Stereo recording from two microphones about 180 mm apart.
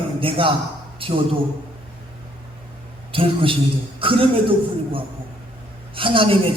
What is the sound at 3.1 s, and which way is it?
A man's voice, 30° right (ahead or behind).